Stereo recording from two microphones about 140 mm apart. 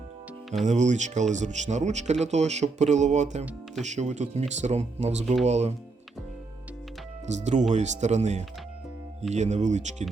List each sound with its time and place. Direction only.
0.6 s speech: 60° right (ahead or behind)
7.3 s speech: 55° right (ahead or behind)